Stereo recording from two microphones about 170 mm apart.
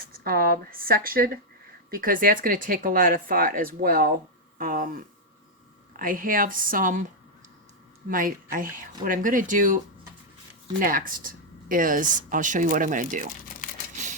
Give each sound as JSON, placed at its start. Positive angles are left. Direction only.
{"t": 0.1, "sound": "speech", "side_deg": -60}
{"t": 6.0, "sound": "speech", "side_deg": -55}
{"t": 8.1, "sound": "speech", "side_deg": -55}
{"t": 10.8, "sound": "speech", "side_deg": -55}